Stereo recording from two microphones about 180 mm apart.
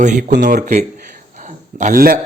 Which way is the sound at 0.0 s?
45° right (ahead or behind).